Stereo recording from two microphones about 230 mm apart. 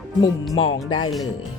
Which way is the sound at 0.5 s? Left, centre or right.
Left.